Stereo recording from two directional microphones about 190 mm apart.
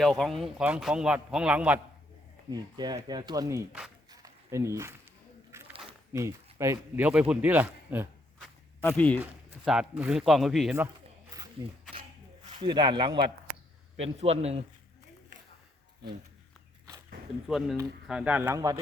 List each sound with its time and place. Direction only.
0.0 s a man's voice: centre (ahead or behind)
2.5 s speech: 20° right (ahead or behind)
4.1 s a sound: 15° right (ahead or behind)
6.1 s speech: 15° right (ahead or behind)
8.8 s speech: 10° left (ahead or behind)
9.2 s a man's voice: 5° right (ahead or behind)
11.3 s a sound: 20° right (ahead or behind)
12.6 s a man's voice: 25° right (ahead or behind)
17.5 s a man's voice: 5° right (ahead or behind)